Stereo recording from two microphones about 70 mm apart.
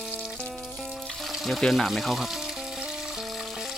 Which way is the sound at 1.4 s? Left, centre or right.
Centre.